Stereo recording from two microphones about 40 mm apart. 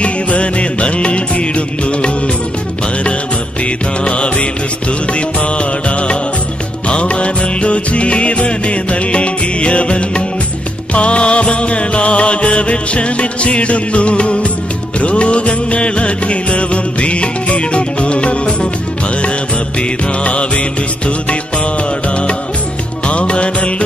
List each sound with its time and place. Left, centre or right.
0.0 s music: left
3.6 s music: left
20.2 s music: left
23.0 s music: left